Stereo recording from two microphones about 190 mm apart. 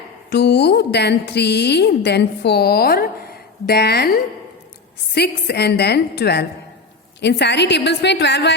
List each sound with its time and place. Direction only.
0.3 s a woman's voice: 60° left (ahead or behind)